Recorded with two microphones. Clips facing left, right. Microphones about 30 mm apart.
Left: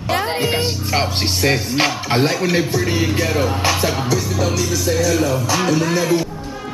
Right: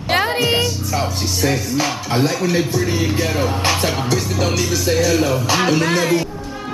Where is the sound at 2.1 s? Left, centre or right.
Centre.